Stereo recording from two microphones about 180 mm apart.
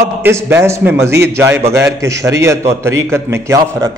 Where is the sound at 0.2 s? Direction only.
15° right (ahead or behind).